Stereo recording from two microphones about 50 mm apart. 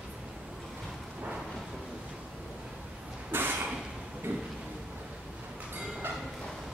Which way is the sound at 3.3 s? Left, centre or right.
Right.